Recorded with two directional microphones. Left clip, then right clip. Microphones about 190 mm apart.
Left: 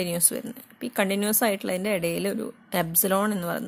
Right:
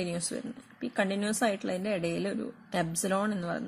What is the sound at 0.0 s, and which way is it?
A woman's voice, 35° left (ahead or behind).